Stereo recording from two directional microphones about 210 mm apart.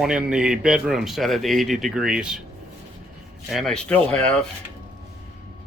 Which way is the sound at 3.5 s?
Centre (ahead or behind).